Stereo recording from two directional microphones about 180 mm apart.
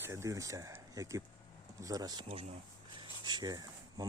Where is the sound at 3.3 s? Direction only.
25° right (ahead or behind).